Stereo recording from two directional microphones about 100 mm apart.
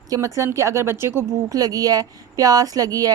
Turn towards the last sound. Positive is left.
turn(degrees=-35)  # may be behind; listen again after turning